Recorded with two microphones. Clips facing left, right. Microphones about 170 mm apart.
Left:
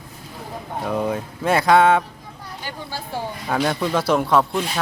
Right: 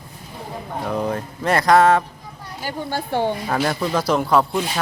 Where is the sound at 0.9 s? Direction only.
5° left (ahead or behind).